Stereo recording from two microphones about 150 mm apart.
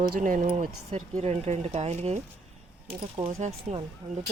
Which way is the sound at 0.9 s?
45° right (ahead or behind).